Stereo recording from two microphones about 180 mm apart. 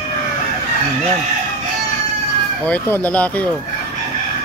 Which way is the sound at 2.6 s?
10° left (ahead or behind).